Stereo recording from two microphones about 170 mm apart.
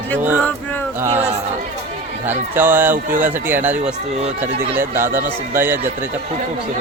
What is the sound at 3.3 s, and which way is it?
Speech, 10° right (ahead or behind).